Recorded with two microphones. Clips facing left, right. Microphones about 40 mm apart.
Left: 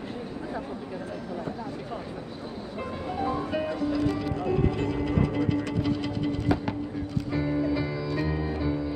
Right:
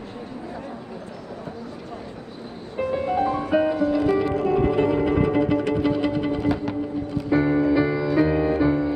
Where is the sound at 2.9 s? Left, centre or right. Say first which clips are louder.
Right 7 dB; centre.